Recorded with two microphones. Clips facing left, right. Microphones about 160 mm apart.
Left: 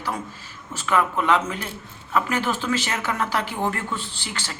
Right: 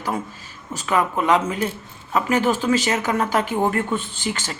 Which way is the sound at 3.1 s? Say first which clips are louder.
Right 4 dB; 20° right (ahead or behind).